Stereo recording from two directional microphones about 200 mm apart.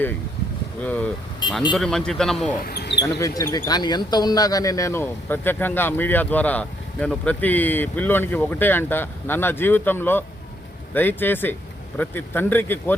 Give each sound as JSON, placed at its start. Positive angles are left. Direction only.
{"t": 0.8, "sound": "speech", "side_deg": 5}
{"t": 2.6, "sound": "speech", "side_deg": 55}
{"t": 3.0, "sound": "speech", "side_deg": 15}